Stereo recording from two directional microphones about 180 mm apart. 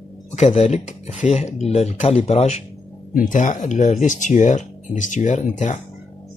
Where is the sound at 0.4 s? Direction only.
40° left (ahead or behind).